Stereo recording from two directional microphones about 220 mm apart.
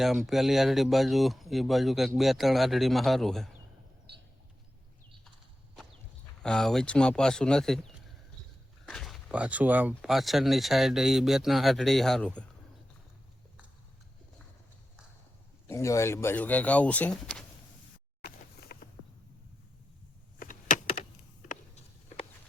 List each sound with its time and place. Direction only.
0.0 s speech: centre (ahead or behind)
6.4 s speech: centre (ahead or behind)
15.6 s speech: 15° left (ahead or behind)
18.2 s a sound: 40° left (ahead or behind)
20.4 s power windows: 35° left (ahead or behind)